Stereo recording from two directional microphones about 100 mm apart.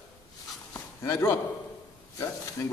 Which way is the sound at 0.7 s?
30° left (ahead or behind).